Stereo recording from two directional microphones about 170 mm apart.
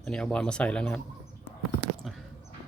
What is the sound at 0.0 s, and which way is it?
Speech, 5° left (ahead or behind).